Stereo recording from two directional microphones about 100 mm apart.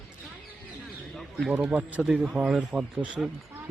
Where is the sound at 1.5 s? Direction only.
15° right (ahead or behind).